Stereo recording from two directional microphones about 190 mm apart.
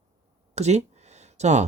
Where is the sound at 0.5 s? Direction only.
35° right (ahead or behind).